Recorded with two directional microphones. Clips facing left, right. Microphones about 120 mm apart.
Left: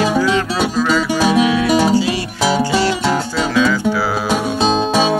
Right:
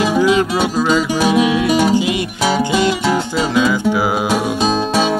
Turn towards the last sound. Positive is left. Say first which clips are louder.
# even
turn(degrees=-20)  # may be behind; listen again after turning